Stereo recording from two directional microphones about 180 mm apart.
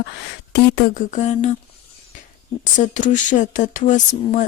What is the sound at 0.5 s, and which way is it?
Speech, 60° left (ahead or behind).